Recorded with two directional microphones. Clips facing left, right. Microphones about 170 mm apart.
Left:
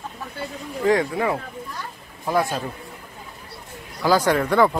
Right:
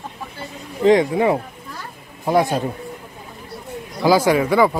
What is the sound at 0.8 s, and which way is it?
Speech, 20° right (ahead or behind).